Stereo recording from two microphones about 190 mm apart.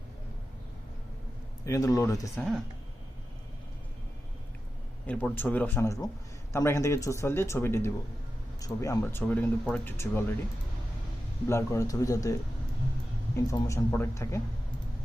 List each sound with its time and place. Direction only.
1.6 s speech: 15° left (ahead or behind)
5.0 s speech: 10° left (ahead or behind)
11.4 s speech: 15° left (ahead or behind)